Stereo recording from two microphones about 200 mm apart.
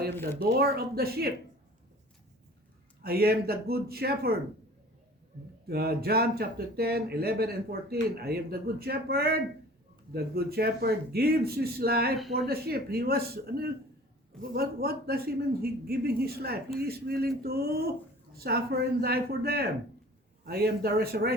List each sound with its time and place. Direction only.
0.1 s speech: 10° left (ahead or behind)
0.6 s speech: 50° right (ahead or behind)
3.0 s speech: 50° right (ahead or behind)
5.6 s speech: 50° right (ahead or behind)